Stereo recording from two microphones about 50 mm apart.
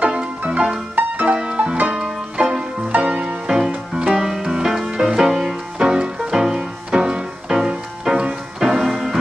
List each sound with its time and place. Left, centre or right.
0.0 s music: right
0.9 s music: right
1.3 s music: right
3.0 s music: right
3.4 s music: centre